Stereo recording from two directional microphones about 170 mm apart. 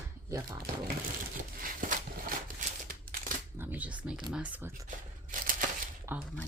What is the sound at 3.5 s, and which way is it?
Speech, 10° right (ahead or behind).